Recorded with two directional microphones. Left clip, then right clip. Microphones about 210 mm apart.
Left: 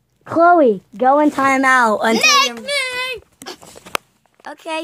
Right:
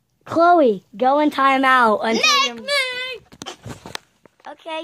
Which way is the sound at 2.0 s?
5° left (ahead or behind).